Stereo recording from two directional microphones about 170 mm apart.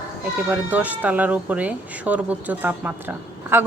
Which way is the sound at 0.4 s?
10° right (ahead or behind).